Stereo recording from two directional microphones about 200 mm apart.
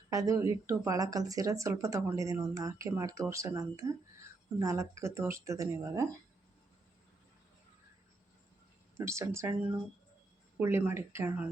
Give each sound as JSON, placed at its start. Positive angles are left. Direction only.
{"t": 0.1, "sound": "speech", "side_deg": -15}
{"t": 9.0, "sound": "speech", "side_deg": -15}
{"t": 10.6, "sound": "speech", "side_deg": -10}